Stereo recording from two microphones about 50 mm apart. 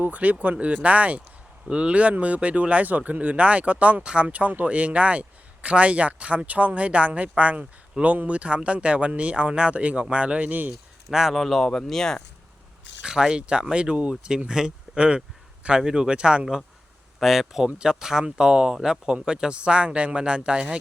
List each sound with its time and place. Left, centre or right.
0.0 s speech: right
11.1 s speech: centre
11.3 s speech: centre
13.0 s speech: centre
17.2 s speech: centre